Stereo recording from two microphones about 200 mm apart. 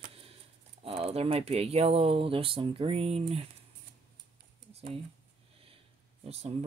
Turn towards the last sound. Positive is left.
turn(degrees=-30)  # may be behind; listen again after turning